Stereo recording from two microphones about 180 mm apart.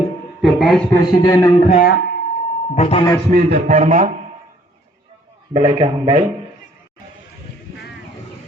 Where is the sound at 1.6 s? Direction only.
40° left (ahead or behind).